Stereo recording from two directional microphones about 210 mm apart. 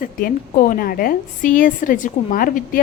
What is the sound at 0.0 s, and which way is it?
A woman's voice, 40° left (ahead or behind).